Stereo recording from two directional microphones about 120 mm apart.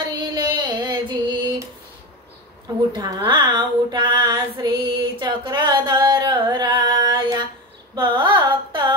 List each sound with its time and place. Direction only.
0.2 s female singing: 35° right (ahead or behind)
2.9 s female singing: 40° right (ahead or behind)
7.9 s a sound: 40° right (ahead or behind)